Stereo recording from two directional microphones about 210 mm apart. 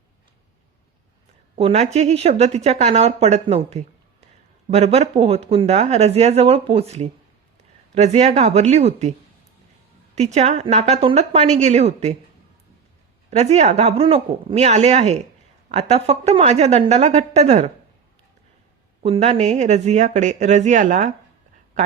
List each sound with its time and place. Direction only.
1.5 s speech: 30° right (ahead or behind)
10.2 s speech: 30° right (ahead or behind)
13.3 s speech: 30° right (ahead or behind)
19.0 s speech: 30° right (ahead or behind)